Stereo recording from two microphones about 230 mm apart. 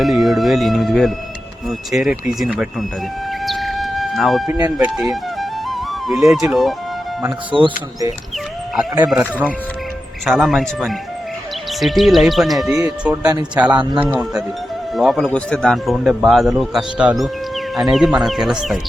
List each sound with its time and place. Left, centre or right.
0.0 s speech: centre
3.4 s music: centre
4.4 s music: centre
6.5 s speech: centre
7.5 s speech: right
8.7 s speech: centre
12.8 s speech: centre